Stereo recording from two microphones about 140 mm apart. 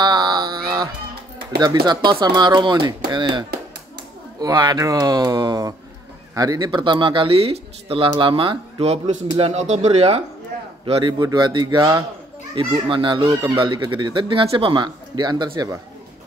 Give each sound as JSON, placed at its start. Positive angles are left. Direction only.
{"t": 0.0, "sound": "a sound", "side_deg": -30}
{"t": 1.6, "sound": "speech", "side_deg": -30}
{"t": 10.9, "sound": "speech", "side_deg": -30}